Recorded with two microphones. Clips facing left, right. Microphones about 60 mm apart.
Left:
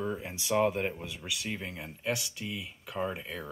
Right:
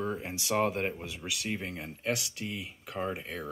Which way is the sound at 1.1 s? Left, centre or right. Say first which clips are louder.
Right 1 dB; centre.